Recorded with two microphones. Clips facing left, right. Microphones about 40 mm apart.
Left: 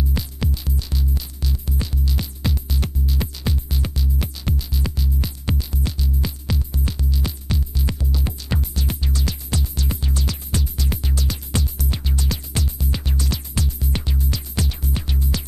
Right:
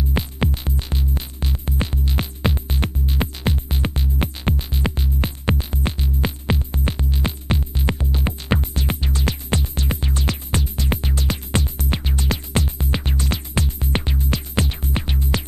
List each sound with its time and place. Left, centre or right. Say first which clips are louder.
0.1 s music: right 4 dB; right